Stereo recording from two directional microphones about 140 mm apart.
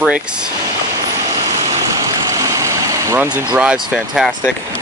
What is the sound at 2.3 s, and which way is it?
Vehicle, 25° right (ahead or behind).